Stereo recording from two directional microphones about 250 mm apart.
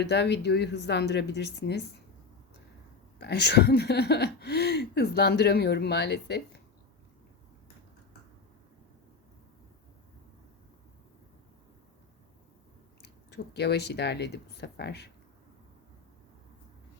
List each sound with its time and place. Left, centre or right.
0.0 s a woman's voice: left
3.2 s speech: left
13.3 s speech: left